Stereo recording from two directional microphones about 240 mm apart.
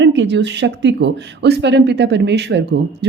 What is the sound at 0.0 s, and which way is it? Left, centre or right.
Speech, right.